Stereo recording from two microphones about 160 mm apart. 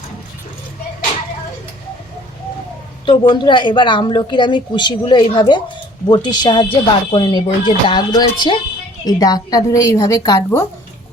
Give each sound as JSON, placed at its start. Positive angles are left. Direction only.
{"t": 3.1, "sound": "a woman's voice", "side_deg": 30}